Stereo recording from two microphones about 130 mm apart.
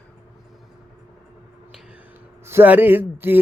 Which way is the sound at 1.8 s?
10° right (ahead or behind).